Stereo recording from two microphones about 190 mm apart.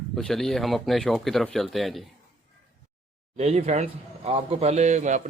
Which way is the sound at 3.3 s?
35° right (ahead or behind).